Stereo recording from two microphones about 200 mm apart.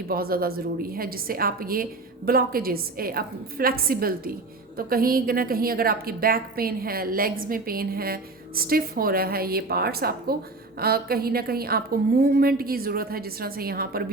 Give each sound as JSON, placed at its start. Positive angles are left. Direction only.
{"t": 0.1, "sound": "a woman's voice", "side_deg": -50}